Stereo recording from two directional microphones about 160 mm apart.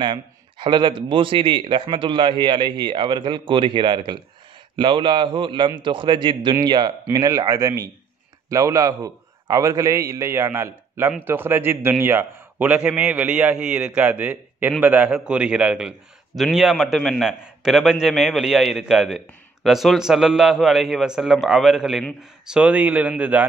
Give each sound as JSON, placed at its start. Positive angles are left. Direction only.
{"t": 0.0, "sound": "a man's voice", "side_deg": -30}